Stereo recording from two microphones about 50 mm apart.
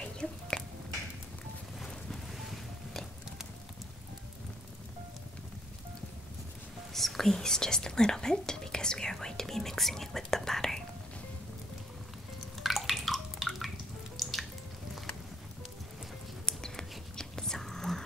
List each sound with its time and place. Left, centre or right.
0.0 s a sound: centre
6.9 s speech: centre
12.5 s bathtub: centre
14.1 s drip: centre
16.4 s mouse: centre
17.2 s whispering: centre